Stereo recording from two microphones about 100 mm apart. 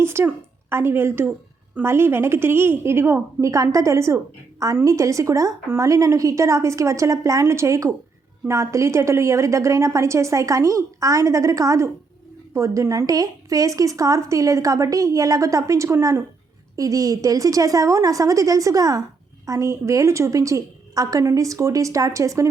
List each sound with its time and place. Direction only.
0.0 s a woman's voice: 25° right (ahead or behind)